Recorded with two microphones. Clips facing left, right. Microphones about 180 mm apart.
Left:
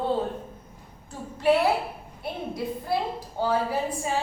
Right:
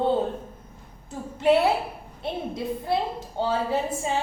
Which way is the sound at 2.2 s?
25° right (ahead or behind).